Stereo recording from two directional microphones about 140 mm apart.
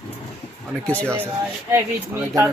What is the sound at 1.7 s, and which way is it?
Speech, 15° right (ahead or behind).